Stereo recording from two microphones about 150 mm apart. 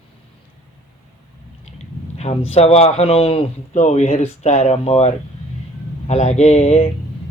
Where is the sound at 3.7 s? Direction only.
50° left (ahead or behind).